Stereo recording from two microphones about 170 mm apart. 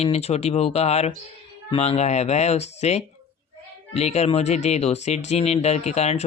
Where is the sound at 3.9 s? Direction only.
40° left (ahead or behind).